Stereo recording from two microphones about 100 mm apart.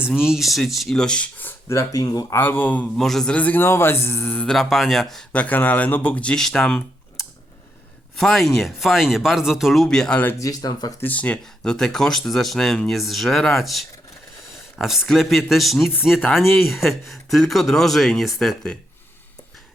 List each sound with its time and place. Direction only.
0.2 s speech: 5° right (ahead or behind); by 2.2 s 35° left (ahead or behind)
2.3 s speech: 20° left (ahead or behind)
3.0 s speech: 5° left (ahead or behind)
4.5 s speech: centre (ahead or behind)
5.3 s speech: 15° left (ahead or behind)
8.2 s speech: centre (ahead or behind)
10.3 s speech: 35° left (ahead or behind)
11.0 s speech: 15° left (ahead or behind)